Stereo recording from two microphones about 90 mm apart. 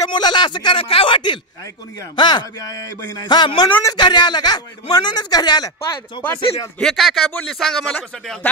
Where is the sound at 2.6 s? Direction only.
40° left (ahead or behind).